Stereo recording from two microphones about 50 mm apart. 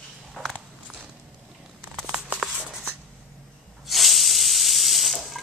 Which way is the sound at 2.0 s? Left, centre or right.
Right.